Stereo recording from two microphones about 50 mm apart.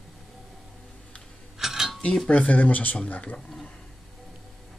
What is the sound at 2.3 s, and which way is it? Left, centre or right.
Speech, left.